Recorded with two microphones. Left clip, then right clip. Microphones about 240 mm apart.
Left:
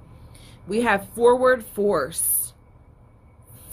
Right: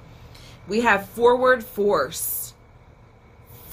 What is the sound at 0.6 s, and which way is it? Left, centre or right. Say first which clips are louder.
Speech: right 2 dB; left.